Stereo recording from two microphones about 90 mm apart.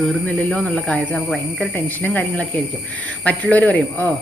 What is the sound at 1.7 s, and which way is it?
Speech, 20° left (ahead or behind).